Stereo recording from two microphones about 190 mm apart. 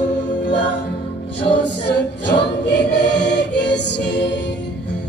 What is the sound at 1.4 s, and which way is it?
Choir, 65° left (ahead or behind).